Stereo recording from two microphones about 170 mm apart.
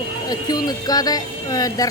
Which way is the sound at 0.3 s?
25° left (ahead or behind).